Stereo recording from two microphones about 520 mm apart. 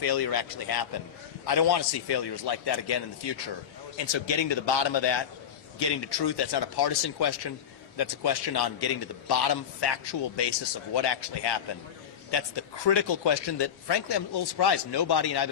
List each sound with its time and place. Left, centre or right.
0.0 s speech: left